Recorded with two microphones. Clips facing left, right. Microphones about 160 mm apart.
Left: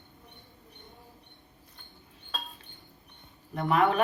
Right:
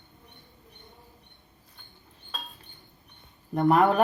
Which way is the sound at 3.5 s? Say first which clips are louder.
Right 4 dB; 40° right (ahead or behind).